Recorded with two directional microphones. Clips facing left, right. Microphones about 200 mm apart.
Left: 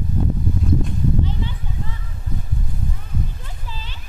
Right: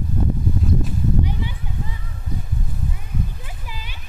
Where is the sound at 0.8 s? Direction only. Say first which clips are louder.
Even; 10° right (ahead or behind).